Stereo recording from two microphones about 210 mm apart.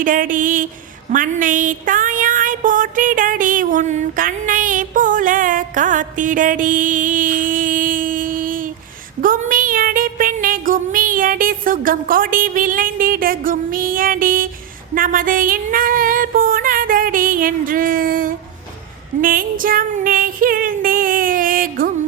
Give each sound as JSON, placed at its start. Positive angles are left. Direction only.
{"t": 0.0, "sound": "a sound", "side_deg": -40}
{"t": 9.2, "sound": "music", "side_deg": -40}
{"t": 14.9, "sound": "female singing", "side_deg": -40}
{"t": 19.2, "sound": "music", "side_deg": -40}